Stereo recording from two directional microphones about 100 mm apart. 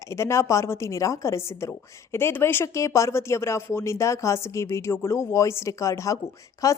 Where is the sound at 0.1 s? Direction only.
30° left (ahead or behind).